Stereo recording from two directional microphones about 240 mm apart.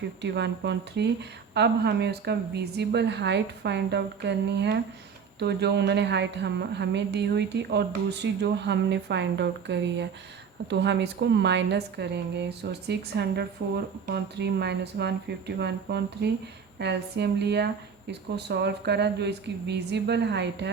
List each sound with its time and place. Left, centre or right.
0.2 s a woman's voice: right